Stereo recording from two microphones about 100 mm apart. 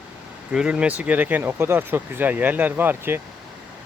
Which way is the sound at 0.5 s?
10° right (ahead or behind).